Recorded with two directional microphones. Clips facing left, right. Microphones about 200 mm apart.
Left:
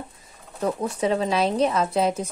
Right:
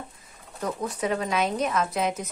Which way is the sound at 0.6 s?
30° left (ahead or behind).